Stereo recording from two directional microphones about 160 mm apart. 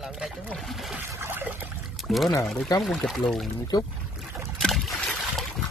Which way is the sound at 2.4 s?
Centre (ahead or behind).